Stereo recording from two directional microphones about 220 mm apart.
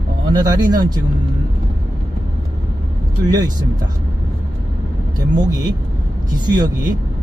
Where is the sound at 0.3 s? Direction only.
20° right (ahead or behind).